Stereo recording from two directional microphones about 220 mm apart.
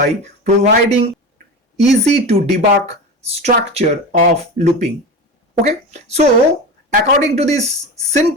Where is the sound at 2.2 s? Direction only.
30° right (ahead or behind).